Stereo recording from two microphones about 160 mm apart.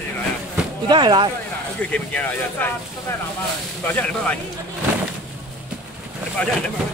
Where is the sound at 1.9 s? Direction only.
10° left (ahead or behind).